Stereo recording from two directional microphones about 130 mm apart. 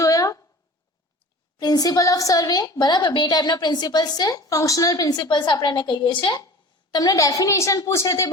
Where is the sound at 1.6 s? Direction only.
30° left (ahead or behind).